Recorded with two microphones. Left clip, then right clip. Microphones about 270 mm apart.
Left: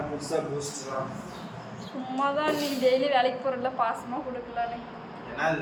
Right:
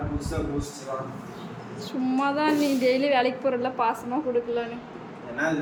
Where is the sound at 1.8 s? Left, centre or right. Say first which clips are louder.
Right 3 dB; centre.